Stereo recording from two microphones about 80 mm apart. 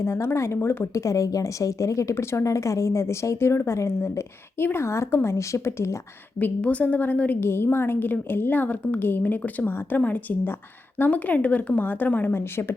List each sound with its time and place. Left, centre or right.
0.0 s a woman's voice: left
1.0 s a woman's voice: left
6.4 s a woman's voice: centre; by 12.7 s left